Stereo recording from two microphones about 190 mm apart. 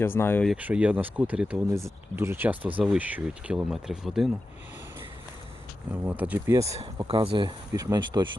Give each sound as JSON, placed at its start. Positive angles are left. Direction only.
{"t": 0.0, "sound": "speech", "side_deg": 10}
{"t": 0.5, "sound": "speech", "side_deg": -5}
{"t": 5.9, "sound": "speech", "side_deg": -10}
{"t": 7.1, "sound": "speech", "side_deg": -30}